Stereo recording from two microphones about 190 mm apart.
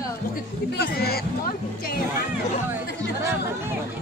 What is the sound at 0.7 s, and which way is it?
Speech, 55° left (ahead or behind).